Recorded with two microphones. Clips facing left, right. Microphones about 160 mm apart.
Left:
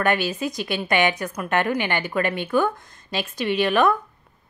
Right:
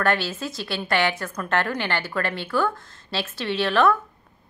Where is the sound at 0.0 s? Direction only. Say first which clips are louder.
Left 2 dB; 15° left (ahead or behind).